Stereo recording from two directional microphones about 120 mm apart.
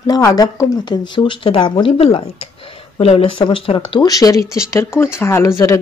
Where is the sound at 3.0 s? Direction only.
55° left (ahead or behind); by 5.8 s 25° left (ahead or behind).